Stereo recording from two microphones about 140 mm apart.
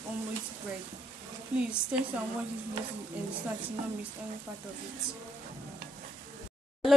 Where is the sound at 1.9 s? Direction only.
10° right (ahead or behind).